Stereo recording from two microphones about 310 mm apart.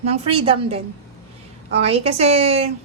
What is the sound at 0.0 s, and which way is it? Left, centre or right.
A woman's voice, centre.